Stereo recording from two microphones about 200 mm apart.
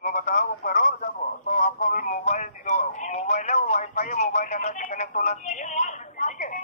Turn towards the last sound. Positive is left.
turn(degrees=35)  # may be behind; listen again after turning